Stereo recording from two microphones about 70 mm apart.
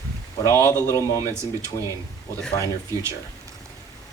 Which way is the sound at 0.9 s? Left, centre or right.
Left.